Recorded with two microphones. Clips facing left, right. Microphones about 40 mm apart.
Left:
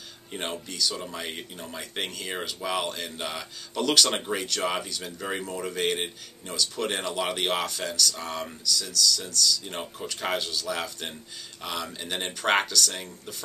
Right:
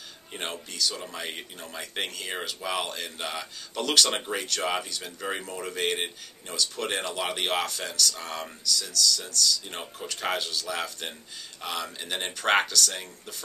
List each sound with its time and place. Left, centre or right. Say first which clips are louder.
0.3 s speech: left 2 dB; centre